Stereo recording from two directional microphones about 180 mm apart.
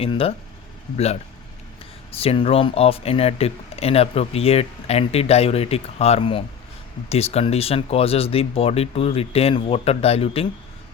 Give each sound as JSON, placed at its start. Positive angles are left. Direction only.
{"t": 0.0, "sound": "speech", "side_deg": 30}